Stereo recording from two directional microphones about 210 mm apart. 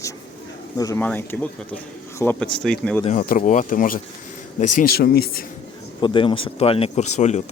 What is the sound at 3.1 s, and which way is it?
Speech, 40° left (ahead or behind).